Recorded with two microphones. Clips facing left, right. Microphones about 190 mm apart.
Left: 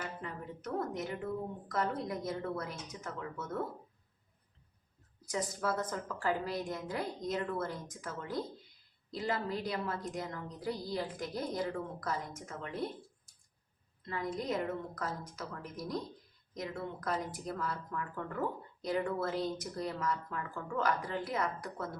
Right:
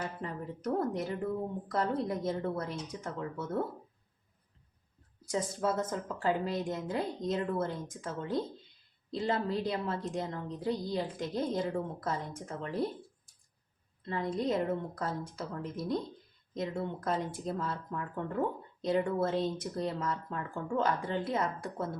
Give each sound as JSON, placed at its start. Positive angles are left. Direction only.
{"t": 0.0, "sound": "a woman's voice", "side_deg": -30}
{"t": 5.3, "sound": "speech", "side_deg": -25}
{"t": 14.1, "sound": "speech", "side_deg": -30}